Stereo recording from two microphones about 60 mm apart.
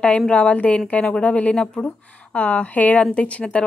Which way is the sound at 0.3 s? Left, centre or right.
Centre.